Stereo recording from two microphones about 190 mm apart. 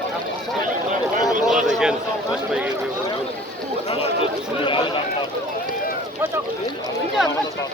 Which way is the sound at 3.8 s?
30° left (ahead or behind).